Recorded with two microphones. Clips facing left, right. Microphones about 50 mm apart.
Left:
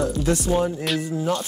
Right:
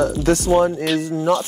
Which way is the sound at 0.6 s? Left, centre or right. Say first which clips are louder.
Right 6 dB; right.